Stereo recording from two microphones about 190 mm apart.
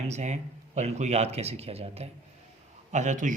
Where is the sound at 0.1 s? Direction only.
40° right (ahead or behind).